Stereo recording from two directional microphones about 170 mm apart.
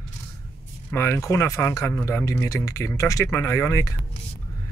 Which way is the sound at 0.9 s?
15° left (ahead or behind).